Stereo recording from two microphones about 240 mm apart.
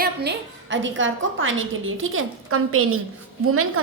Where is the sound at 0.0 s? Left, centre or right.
Right.